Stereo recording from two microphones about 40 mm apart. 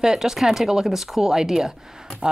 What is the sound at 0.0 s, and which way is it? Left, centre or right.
Speech, centre.